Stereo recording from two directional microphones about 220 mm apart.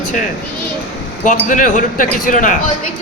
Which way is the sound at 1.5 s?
35° left (ahead or behind).